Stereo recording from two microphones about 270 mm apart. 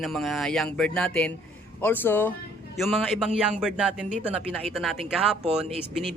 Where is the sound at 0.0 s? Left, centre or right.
Centre.